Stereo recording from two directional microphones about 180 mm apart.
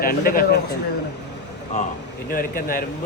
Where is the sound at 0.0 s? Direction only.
55° left (ahead or behind).